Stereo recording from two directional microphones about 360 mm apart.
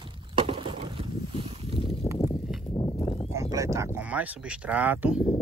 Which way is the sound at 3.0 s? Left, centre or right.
Centre.